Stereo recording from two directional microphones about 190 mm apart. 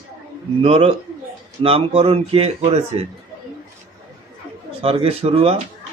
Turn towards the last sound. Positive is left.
turn(degrees=-30)  # may be behind; listen again after turning